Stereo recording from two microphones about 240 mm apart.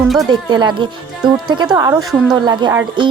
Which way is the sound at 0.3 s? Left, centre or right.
Centre.